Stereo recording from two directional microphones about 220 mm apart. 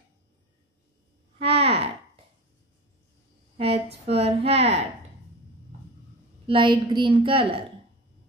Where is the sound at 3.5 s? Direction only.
25° right (ahead or behind).